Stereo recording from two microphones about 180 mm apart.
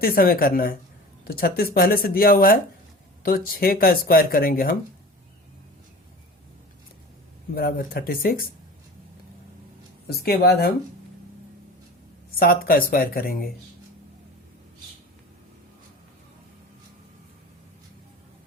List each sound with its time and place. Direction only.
0.0 s speech: 55° left (ahead or behind)
7.5 s speech: 55° left (ahead or behind)
10.1 s speech: 60° left (ahead or behind)
12.4 s speech: 55° left (ahead or behind)